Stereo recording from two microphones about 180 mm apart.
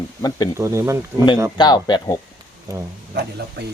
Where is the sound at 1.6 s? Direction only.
25° left (ahead or behind).